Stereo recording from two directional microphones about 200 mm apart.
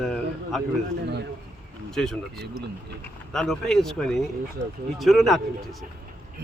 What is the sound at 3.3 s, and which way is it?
Speech, centre (ahead or behind).